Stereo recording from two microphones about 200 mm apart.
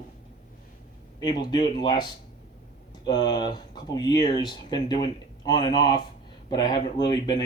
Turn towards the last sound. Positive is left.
turn(degrees=20)  # may be behind; listen again after turning